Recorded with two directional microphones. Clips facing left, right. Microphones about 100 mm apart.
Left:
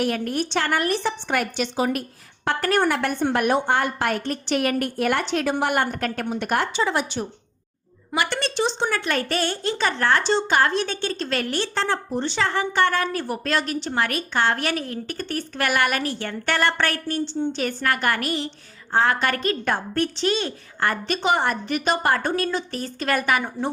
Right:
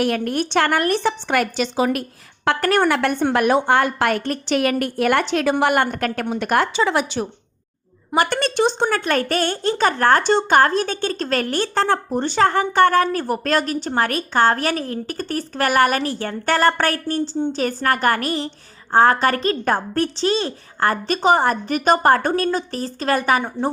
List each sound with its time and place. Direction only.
0.0 s a woman's voice: 60° right (ahead or behind); by 7.3 s 90° right
8.1 s a woman's voice: 45° right (ahead or behind)